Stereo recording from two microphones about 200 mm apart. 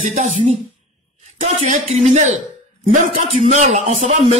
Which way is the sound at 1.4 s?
35° right (ahead or behind).